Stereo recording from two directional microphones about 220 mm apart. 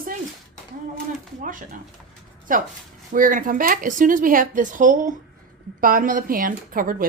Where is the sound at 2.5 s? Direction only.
40° right (ahead or behind).